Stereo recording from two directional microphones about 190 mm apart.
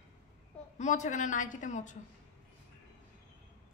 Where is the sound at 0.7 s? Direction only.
40° left (ahead or behind).